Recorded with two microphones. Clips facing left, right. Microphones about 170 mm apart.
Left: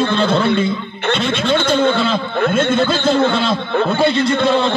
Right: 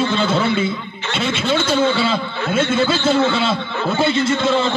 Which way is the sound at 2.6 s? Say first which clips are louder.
Even; 55° left (ahead or behind).